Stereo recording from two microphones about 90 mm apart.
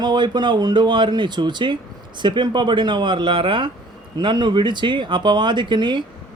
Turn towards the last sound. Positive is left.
turn(degrees=-60)  # may be behind; listen again after turning